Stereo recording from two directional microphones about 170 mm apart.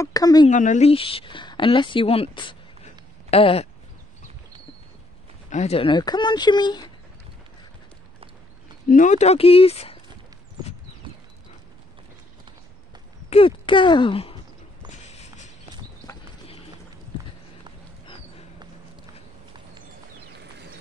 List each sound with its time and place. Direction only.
0.0 s speech: 20° left (ahead or behind)
0.5 s speech: 45° left (ahead or behind); by 2.5 s 30° left (ahead or behind)
3.3 s a sound: 35° left (ahead or behind)
5.5 s speech: 40° left (ahead or behind)
8.8 s speech: 50° left (ahead or behind)
13.3 s speech: 30° left (ahead or behind)
15.0 s walk: 45° left (ahead or behind)
16.0 s clip-clop: 20° left (ahead or behind)
18.0 s a sound: 35° left (ahead or behind)